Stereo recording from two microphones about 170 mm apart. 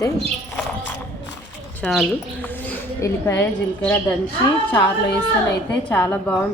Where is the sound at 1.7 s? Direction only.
5° left (ahead or behind).